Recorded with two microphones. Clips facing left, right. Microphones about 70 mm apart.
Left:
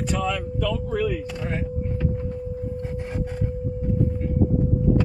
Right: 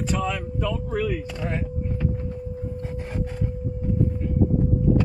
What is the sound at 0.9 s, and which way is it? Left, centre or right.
Speech, right.